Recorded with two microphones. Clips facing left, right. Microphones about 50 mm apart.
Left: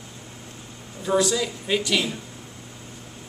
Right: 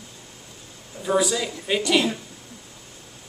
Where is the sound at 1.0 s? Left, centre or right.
Centre.